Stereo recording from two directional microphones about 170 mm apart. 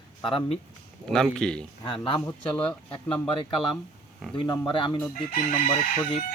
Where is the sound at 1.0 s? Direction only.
5° left (ahead or behind).